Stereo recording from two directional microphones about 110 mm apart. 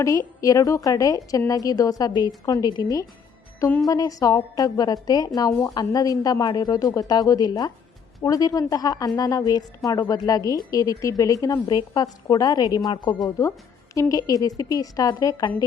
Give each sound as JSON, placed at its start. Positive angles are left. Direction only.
{"t": 0.0, "sound": "a woman's voice", "side_deg": 30}
{"t": 13.9, "sound": "a woman's voice", "side_deg": 30}